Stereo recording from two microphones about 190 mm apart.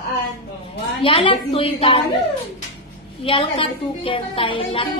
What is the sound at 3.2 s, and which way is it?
A woman's voice, 25° left (ahead or behind).